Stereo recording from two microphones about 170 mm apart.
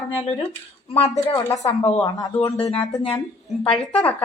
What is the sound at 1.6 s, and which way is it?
Speech, 35° left (ahead or behind).